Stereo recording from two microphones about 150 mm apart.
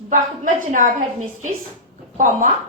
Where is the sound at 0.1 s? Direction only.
60° right (ahead or behind).